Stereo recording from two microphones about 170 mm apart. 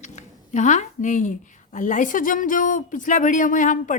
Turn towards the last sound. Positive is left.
turn(degrees=50)  # may be behind; listen again after turning